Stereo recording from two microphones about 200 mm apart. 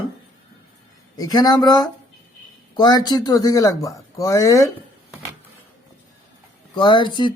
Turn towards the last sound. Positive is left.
turn(degrees=25)  # may be behind; listen again after turning